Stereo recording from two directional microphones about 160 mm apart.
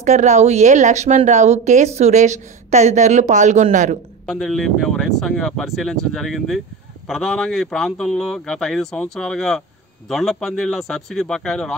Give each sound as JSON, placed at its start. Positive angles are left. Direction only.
{"t": 0.0, "sound": "speech", "side_deg": -45}
{"t": 4.3, "sound": "speech", "side_deg": 0}